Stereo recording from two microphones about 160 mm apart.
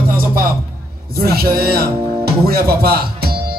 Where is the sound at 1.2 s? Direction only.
70° right (ahead or behind).